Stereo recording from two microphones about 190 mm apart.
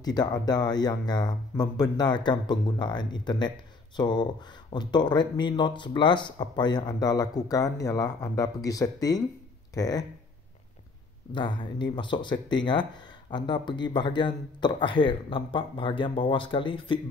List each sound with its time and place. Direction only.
0.0 s speech: 20° left (ahead or behind)
11.3 s speech: 25° left (ahead or behind)